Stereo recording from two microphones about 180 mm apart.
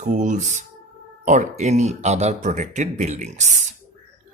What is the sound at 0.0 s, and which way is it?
Speech, 45° right (ahead or behind).